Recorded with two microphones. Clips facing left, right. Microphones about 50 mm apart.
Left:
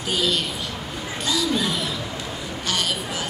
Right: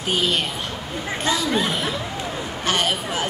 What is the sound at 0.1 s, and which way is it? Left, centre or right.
Speech, right.